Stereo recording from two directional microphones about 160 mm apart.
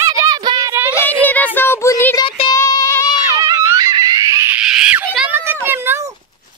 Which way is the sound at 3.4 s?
20° right (ahead or behind).